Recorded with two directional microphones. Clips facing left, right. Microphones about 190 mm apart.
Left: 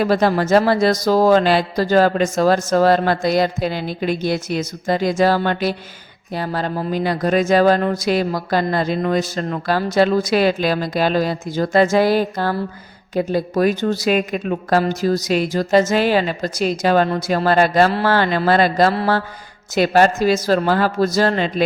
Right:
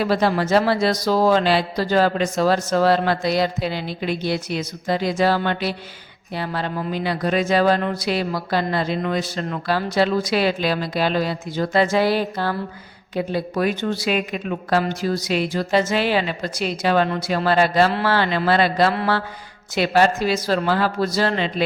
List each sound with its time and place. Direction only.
0.0 s speech: 45° left (ahead or behind)